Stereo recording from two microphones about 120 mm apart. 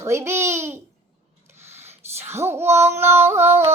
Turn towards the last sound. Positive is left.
turn(degrees=-20)  # may be behind; listen again after turning